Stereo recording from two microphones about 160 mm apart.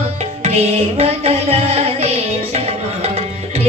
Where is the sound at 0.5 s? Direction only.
40° right (ahead or behind).